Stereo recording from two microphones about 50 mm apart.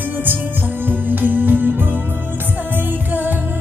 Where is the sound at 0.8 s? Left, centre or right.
Right.